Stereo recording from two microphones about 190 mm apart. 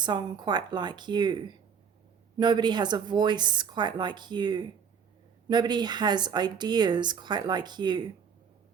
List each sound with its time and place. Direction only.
0.0 s speech: 25° right (ahead or behind)
2.4 s speech: 25° right (ahead or behind)